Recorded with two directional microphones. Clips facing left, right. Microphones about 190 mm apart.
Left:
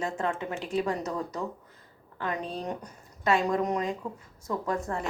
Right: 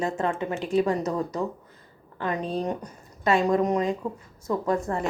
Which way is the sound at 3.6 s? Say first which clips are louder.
Right 5 dB; centre (ahead or behind).